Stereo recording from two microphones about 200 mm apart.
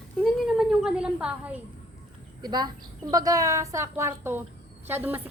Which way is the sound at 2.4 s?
20° right (ahead or behind).